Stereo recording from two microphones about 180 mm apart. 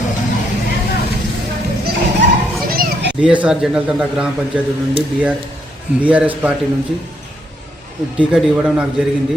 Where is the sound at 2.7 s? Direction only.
55° right (ahead or behind).